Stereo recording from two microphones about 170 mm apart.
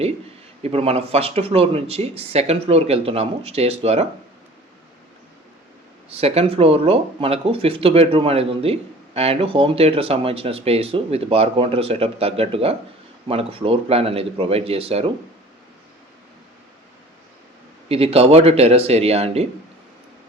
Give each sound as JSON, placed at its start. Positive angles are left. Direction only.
{"t": 0.6, "sound": "speech", "side_deg": -35}
{"t": 6.1, "sound": "speech", "side_deg": -35}
{"t": 17.8, "sound": "speech", "side_deg": -35}